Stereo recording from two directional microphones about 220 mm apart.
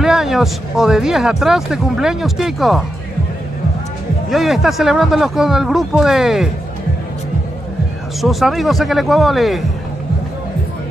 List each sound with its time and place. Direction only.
0.0 s speech: centre (ahead or behind)
4.3 s speech: centre (ahead or behind)
8.2 s speech: centre (ahead or behind)